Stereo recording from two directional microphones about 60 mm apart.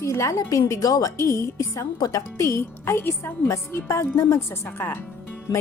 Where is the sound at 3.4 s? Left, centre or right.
Left.